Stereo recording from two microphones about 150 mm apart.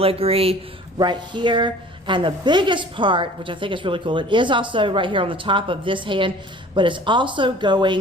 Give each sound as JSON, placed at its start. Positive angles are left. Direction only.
{"t": 0.0, "sound": "a woman's voice", "side_deg": -40}